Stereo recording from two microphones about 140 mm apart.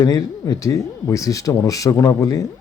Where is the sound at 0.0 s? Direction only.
25° left (ahead or behind).